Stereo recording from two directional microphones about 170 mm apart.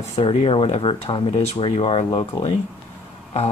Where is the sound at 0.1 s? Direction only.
35° left (ahead or behind).